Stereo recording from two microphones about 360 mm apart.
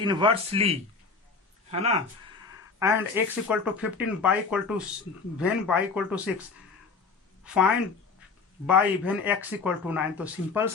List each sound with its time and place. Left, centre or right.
0.0 s speech: centre
2.7 s speech: centre
7.4 s speech: centre